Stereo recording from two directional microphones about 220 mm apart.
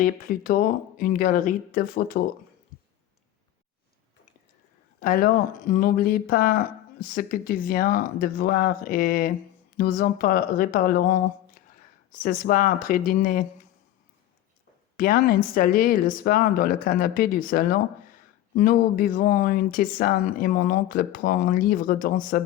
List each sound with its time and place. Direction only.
0.0 s speech: 40° left (ahead or behind)
4.9 s speech: 40° left (ahead or behind)
14.9 s speech: 40° left (ahead or behind)